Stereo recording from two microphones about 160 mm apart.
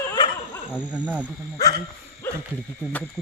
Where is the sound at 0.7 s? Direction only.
10° right (ahead or behind).